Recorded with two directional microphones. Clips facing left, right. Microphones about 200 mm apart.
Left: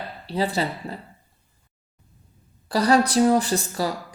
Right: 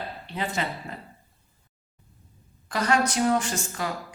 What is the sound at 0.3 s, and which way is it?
Speech, 35° left (ahead or behind).